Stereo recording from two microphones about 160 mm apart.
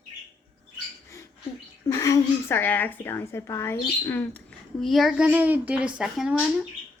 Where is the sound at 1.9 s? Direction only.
20° left (ahead or behind); by 6.3 s 5° right (ahead or behind).